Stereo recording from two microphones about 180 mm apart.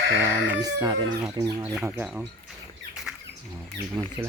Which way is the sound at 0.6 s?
25° right (ahead or behind).